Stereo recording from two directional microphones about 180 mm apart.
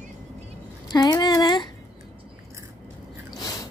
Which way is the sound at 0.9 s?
20° left (ahead or behind).